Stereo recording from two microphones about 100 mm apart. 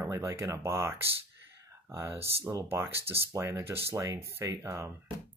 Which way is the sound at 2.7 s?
25° right (ahead or behind).